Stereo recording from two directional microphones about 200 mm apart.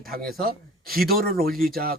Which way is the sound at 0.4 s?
50° right (ahead or behind).